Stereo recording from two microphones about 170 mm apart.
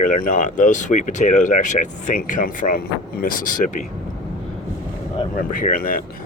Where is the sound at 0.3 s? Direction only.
50° left (ahead or behind).